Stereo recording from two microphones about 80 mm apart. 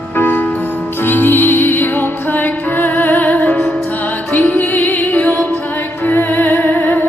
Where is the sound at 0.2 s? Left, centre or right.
Left.